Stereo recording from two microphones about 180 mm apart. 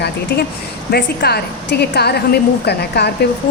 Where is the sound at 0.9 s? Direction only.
60° left (ahead or behind).